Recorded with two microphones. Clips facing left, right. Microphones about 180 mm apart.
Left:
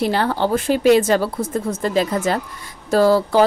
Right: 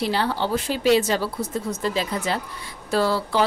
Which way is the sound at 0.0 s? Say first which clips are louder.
Left 5 dB; 50° left (ahead or behind).